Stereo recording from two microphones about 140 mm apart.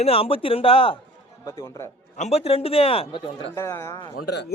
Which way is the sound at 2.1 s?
50° left (ahead or behind).